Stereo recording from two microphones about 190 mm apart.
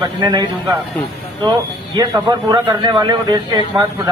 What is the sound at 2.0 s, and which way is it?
A man's voice, 20° right (ahead or behind).